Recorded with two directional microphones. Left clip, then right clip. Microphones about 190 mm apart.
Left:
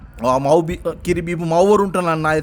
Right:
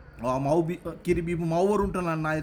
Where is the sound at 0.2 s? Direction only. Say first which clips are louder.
Left 11 dB; 55° left (ahead or behind).